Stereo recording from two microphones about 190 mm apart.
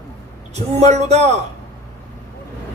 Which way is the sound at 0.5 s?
35° right (ahead or behind).